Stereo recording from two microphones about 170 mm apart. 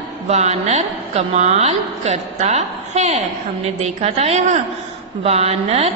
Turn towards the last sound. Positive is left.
turn(degrees=-35)  # may be behind; listen again after turning